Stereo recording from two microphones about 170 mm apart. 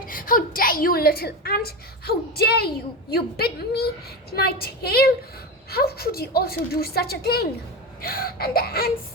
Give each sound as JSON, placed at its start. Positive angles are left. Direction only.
{"t": 0.1, "sound": "a woman's voice", "side_deg": 55}